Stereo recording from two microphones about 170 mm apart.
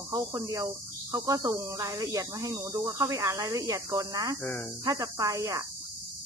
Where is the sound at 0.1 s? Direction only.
20° right (ahead or behind).